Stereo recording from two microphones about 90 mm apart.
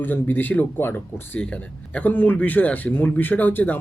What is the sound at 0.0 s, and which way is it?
Speech, 20° left (ahead or behind).